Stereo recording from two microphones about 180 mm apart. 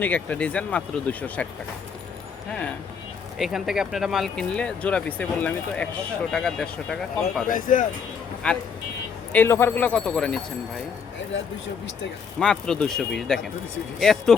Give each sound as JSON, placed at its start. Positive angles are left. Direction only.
{"t": 0.0, "sound": "speech", "side_deg": 10}
{"t": 3.3, "sound": "speech", "side_deg": 0}
{"t": 7.4, "sound": "speech", "side_deg": 45}
{"t": 8.4, "sound": "speech", "side_deg": 5}
{"t": 12.4, "sound": "speech", "side_deg": 5}